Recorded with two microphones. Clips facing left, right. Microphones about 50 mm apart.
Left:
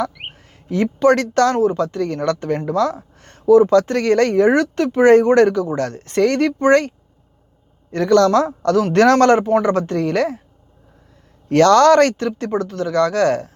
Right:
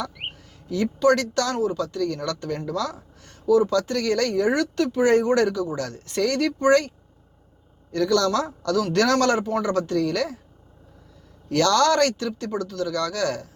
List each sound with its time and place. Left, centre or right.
0.0 s speech: left
11.4 s speech: left